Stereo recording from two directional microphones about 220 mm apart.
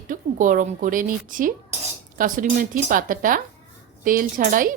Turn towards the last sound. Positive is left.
turn(degrees=-40)  # may be behind; listen again after turning